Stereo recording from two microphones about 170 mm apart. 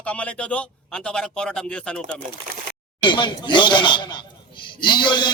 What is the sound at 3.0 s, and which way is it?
Speech, 25° left (ahead or behind).